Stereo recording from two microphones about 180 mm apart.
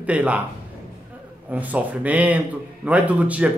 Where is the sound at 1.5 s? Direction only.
10° right (ahead or behind).